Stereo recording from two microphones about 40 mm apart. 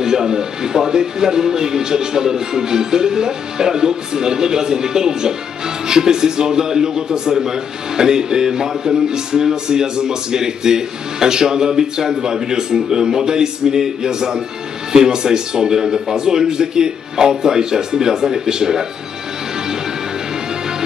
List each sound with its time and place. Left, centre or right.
0.0 s a man's voice: centre